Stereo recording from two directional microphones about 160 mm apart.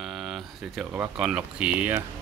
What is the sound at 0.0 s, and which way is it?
Speech, centre (ahead or behind).